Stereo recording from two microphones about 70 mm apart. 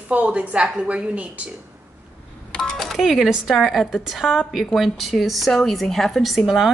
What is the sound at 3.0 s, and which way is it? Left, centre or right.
A woman's voice, centre.